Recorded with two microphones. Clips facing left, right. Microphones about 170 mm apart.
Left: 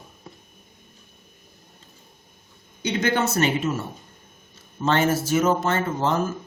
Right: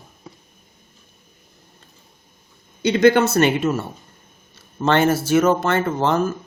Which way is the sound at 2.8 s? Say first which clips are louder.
Right 8 dB; 70° right (ahead or behind).